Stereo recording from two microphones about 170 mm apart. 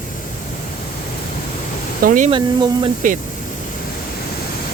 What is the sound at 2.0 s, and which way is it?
Speech, 55° right (ahead or behind).